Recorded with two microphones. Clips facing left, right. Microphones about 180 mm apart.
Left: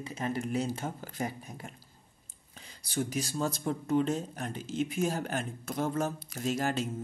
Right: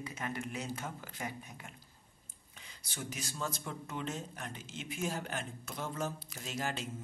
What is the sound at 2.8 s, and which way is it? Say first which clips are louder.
Speech: left 11 dB; 35° left (ahead or behind).